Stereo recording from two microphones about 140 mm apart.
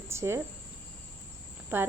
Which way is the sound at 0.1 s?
20° right (ahead or behind).